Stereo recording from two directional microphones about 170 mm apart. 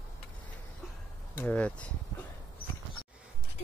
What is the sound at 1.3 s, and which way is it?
Speech, 10° left (ahead or behind).